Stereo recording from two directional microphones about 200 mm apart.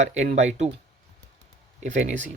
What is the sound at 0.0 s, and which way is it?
Speech, 35° right (ahead or behind).